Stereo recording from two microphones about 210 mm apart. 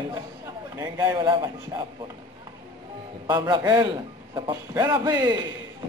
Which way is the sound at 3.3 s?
20° right (ahead or behind).